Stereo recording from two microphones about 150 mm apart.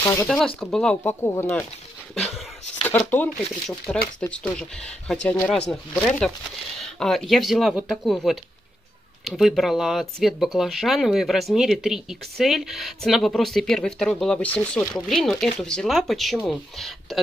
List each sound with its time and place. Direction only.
0.0 s speech: 20° left (ahead or behind)
0.6 s speech: 5° left (ahead or behind)
1.2 s speech: 15° left (ahead or behind)
2.1 s speech: 5° left (ahead or behind)